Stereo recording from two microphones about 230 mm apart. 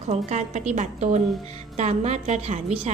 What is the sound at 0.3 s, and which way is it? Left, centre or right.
A woman's voice, right.